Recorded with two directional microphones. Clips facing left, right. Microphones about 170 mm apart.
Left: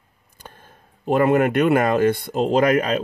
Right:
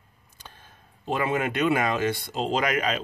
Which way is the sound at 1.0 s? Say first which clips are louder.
Left 9 dB; 55° left (ahead or behind).